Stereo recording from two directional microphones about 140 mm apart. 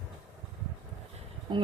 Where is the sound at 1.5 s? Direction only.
35° right (ahead or behind).